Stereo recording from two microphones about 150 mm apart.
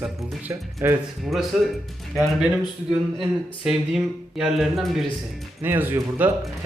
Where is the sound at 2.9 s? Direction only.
5° right (ahead or behind).